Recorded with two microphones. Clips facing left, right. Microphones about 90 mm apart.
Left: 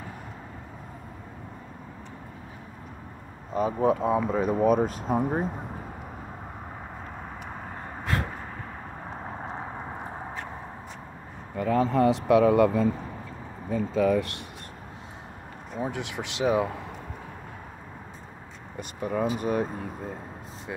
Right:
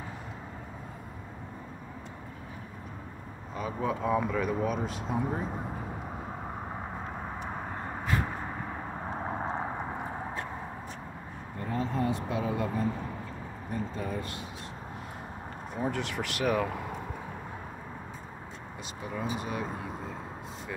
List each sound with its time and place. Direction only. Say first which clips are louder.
3.5 s speech: left 8 dB; 35° left (ahead or behind)
8.0 s vehicle: left 2 dB; 75° left (ahead or behind)
11.5 s speech: left 9 dB; 90° left; by 12.8 s 70° left (ahead or behind)
13.9 s speech: left 12 dB; 90° left
15.8 s speech: even; 15° left (ahead or behind)
18.8 s speech: left 9 dB; 50° left (ahead or behind)